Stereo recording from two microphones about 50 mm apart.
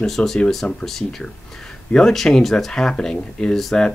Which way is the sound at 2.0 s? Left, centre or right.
Centre.